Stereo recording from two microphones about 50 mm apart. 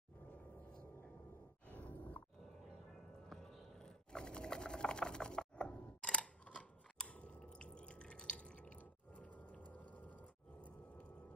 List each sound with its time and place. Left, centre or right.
1.7 s grunt: left
3.3 s typing: centre
9.2 s a sound: left